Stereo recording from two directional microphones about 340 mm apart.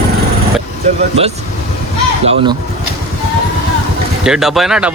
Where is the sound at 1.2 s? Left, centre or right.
Centre.